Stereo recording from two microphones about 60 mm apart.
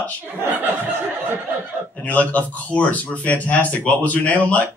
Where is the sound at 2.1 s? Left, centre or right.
Left.